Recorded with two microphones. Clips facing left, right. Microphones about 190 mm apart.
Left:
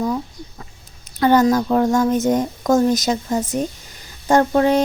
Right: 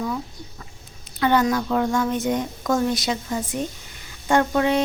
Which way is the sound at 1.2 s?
40° left (ahead or behind).